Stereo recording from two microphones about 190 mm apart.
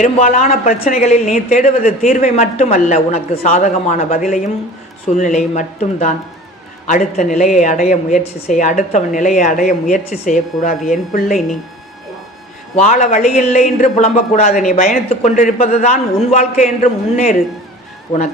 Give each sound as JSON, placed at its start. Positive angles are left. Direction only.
{"t": 0.0, "sound": "speech", "side_deg": 40}
{"t": 11.3, "sound": "speech", "side_deg": 0}
{"t": 12.8, "sound": "speech", "side_deg": 40}